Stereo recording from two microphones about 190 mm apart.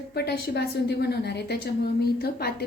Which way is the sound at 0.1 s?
60° left (ahead or behind).